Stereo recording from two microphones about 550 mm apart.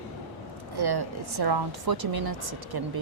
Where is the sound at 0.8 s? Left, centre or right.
Right.